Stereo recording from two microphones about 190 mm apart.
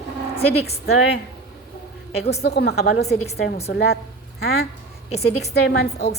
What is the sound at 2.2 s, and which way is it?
Speech, 60° left (ahead or behind).